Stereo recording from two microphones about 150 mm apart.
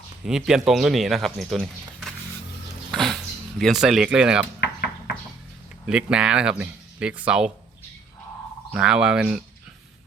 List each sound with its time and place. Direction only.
0.3 s speech: 5° right (ahead or behind)
2.9 s a sound: centre (ahead or behind)
5.8 s speech: 5° right (ahead or behind)
8.7 s speech: 5° right (ahead or behind)